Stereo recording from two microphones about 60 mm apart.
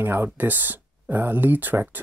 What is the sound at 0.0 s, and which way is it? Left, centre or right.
Speech, right.